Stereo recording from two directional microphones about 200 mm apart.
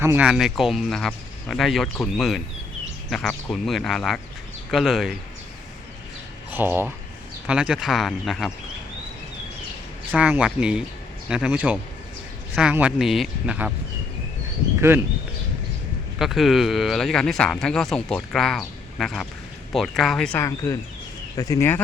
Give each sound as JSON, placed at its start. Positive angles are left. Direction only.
{"t": 0.0, "sound": "speech", "side_deg": -10}
{"t": 6.5, "sound": "speech", "side_deg": -10}
{"t": 10.1, "sound": "speech", "side_deg": -5}
{"t": 14.8, "sound": "speech", "side_deg": -10}
{"t": 16.1, "sound": "speech", "side_deg": 0}